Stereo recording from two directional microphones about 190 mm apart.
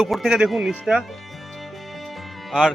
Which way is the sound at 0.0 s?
Centre (ahead or behind).